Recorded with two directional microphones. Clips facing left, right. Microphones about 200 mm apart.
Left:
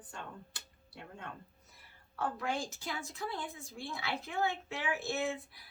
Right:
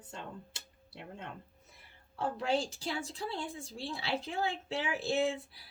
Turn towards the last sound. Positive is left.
turn(degrees=-30)  # may be behind; listen again after turning